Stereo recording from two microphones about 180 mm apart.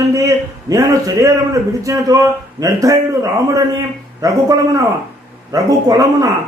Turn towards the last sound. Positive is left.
turn(degrees=-20)  # may be behind; listen again after turning